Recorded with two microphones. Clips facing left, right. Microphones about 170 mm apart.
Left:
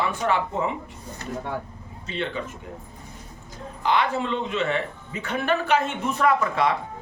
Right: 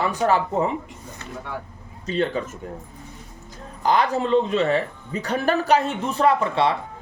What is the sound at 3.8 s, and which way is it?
Speech, 40° right (ahead or behind).